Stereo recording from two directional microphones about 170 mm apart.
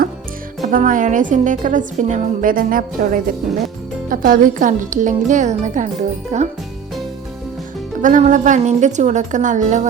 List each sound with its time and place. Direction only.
0.7 s a woman's voice: 50° right (ahead or behind)
8.0 s a woman's voice: 45° right (ahead or behind)